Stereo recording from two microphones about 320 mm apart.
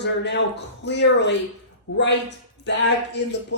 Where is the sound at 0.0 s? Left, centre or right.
Left.